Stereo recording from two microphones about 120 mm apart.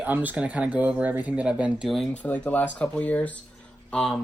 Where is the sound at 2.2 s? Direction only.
10° left (ahead or behind).